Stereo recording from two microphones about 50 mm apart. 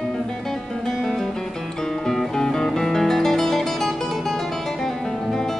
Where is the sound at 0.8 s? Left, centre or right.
Centre.